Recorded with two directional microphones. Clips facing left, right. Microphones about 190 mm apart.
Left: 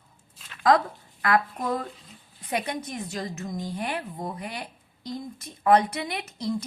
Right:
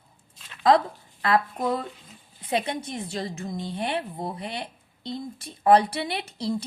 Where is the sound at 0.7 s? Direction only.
25° right (ahead or behind).